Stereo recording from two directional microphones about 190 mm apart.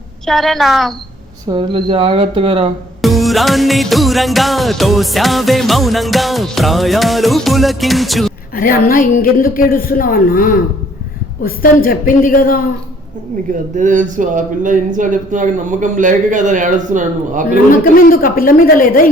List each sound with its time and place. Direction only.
0.3 s music: centre (ahead or behind)
1.5 s speech: 25° right (ahead or behind)
3.0 s music: centre (ahead or behind)
8.5 s speech: 45° left (ahead or behind)
13.5 s a man's voice: 40° right (ahead or behind)
18.0 s speech: 50° left (ahead or behind)